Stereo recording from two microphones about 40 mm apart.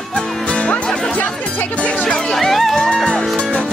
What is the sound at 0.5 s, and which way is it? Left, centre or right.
Music, left.